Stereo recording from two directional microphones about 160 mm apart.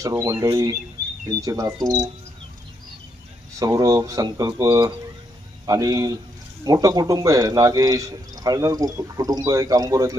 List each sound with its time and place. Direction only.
0.0 s speech: 20° right (ahead or behind)
3.5 s speech: 20° right (ahead or behind)